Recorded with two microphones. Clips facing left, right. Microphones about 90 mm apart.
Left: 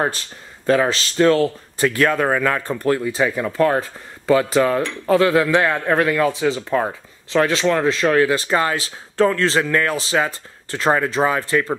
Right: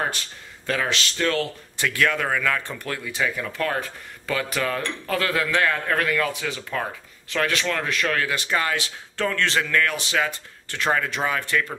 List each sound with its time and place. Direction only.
0.7 s a man's voice: 30° left (ahead or behind)